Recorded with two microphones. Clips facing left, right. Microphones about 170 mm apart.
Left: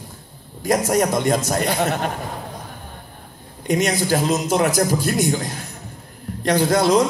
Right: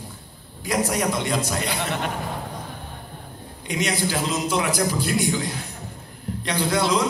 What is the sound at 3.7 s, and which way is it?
A man's voice, 45° left (ahead or behind).